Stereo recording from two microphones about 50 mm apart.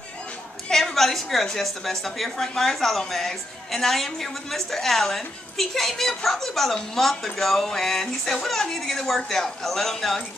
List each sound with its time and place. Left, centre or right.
0.7 s a woman's voice: centre